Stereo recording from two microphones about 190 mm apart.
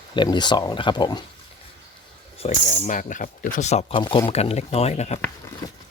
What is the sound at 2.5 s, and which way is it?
Speech, 40° left (ahead or behind).